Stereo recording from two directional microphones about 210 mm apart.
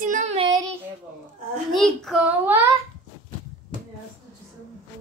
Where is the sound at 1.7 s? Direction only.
Centre (ahead or behind).